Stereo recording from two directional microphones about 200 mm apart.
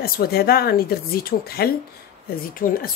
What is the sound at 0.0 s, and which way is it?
Speech, 50° left (ahead or behind).